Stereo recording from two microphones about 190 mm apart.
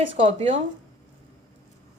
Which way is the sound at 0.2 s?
30° right (ahead or behind).